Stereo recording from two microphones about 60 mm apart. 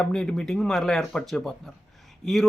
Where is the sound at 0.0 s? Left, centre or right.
Centre.